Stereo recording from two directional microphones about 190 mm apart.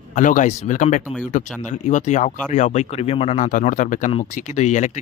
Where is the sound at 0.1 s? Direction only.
40° left (ahead or behind).